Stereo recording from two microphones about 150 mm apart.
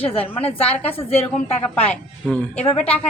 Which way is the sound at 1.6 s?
10° left (ahead or behind).